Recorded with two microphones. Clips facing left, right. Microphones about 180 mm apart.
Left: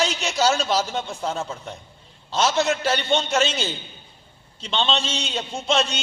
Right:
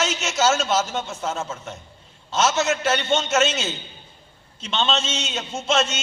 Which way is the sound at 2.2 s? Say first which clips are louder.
Even; 5° right (ahead or behind).